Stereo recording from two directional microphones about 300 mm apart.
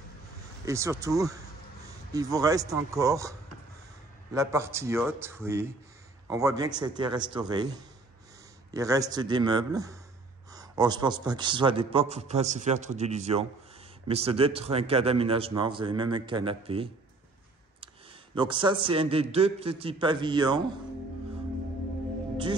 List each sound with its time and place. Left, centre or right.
0.7 s a man's voice: centre
18.3 s a man's voice: centre